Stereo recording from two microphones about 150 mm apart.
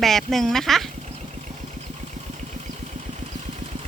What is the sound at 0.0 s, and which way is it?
Speech, centre (ahead or behind).